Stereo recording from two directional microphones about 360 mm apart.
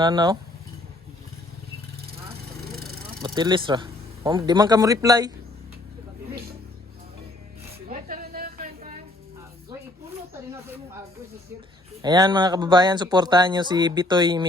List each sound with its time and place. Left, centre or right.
0.0 s speech: centre
3.2 s speech: centre
7.9 s a sound: right
12.0 s speech: centre